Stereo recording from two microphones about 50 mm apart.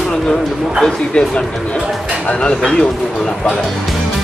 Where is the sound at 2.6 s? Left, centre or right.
Centre.